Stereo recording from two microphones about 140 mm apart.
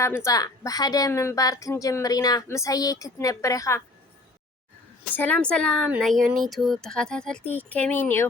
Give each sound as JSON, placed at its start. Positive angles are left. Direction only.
{"t": 0.3, "sound": "a woman's voice", "side_deg": 25}
{"t": 5.1, "sound": "speech", "side_deg": 10}